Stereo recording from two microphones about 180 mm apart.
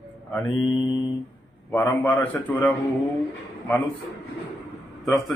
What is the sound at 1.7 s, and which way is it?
A man's voice, 10° left (ahead or behind).